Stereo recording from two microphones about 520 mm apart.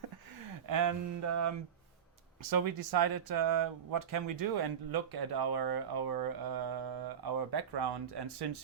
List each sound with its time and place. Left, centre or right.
0.4 s speech: right